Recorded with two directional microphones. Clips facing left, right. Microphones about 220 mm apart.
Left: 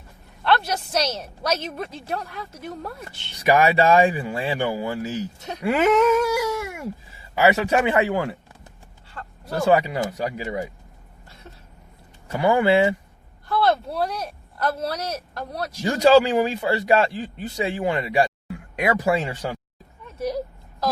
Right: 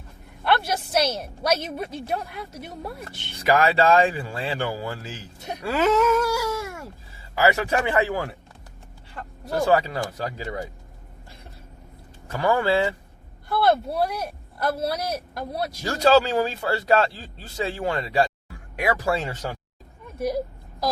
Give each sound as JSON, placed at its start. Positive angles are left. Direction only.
{"t": 0.4, "sound": "speech", "side_deg": -10}
{"t": 3.4, "sound": "speech", "side_deg": 20}
{"t": 5.6, "sound": "wail", "side_deg": 15}
{"t": 7.3, "sound": "speech", "side_deg": 20}
{"t": 9.6, "sound": "speech", "side_deg": 15}
{"t": 12.3, "sound": "speech", "side_deg": 15}
{"t": 13.5, "sound": "speech", "side_deg": -10}
{"t": 15.8, "sound": "speech", "side_deg": 15}
{"t": 20.1, "sound": "a sound", "side_deg": -10}